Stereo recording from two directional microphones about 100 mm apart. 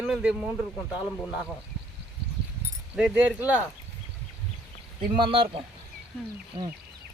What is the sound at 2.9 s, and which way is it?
Speech, 10° right (ahead or behind).